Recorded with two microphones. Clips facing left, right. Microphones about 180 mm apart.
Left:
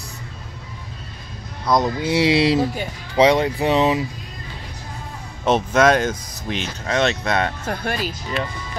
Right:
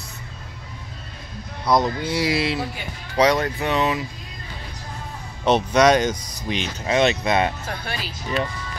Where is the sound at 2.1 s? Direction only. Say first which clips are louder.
Left 6 dB; 25° left (ahead or behind).